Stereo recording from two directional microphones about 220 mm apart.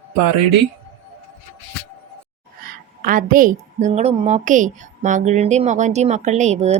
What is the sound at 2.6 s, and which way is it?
A woman's voice, 40° right (ahead or behind).